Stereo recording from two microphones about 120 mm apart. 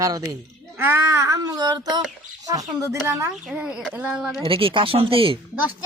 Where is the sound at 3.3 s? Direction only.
Centre (ahead or behind).